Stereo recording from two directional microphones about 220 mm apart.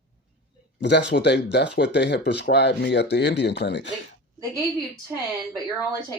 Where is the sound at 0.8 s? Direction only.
50° left (ahead or behind).